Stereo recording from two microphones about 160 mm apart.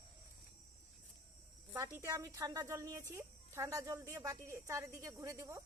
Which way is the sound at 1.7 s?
10° right (ahead or behind).